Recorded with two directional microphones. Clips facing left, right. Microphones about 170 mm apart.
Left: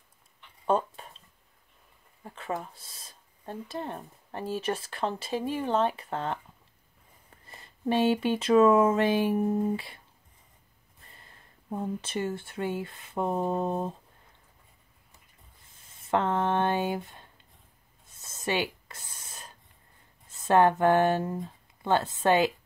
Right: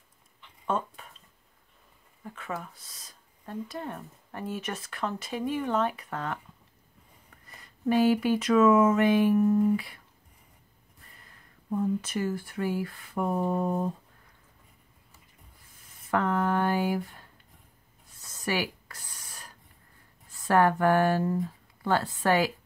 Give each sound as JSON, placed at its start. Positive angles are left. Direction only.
{"t": 0.7, "sound": "a sound", "side_deg": 30}
{"t": 2.2, "sound": "speech", "side_deg": 30}
{"t": 7.4, "sound": "speech", "side_deg": 30}
{"t": 11.1, "sound": "speech", "side_deg": 25}
{"t": 16.0, "sound": "speech", "side_deg": 25}
{"t": 18.0, "sound": "writing", "side_deg": 20}
{"t": 20.2, "sound": "speech", "side_deg": 20}